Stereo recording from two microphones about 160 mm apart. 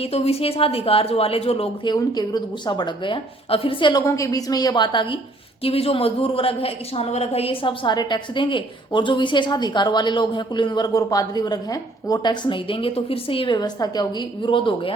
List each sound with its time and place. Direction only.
0.0 s a woman's voice: 40° left (ahead or behind)
4.0 s a woman's voice: 20° left (ahead or behind)